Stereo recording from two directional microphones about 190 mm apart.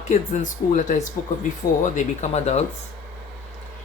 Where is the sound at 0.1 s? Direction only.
40° left (ahead or behind).